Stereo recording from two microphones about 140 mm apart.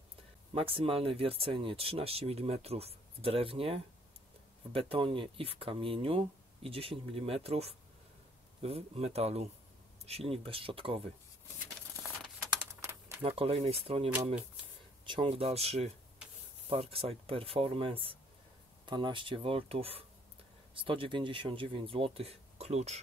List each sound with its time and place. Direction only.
0.6 s speech: 40° right (ahead or behind)
13.2 s speech: 45° right (ahead or behind)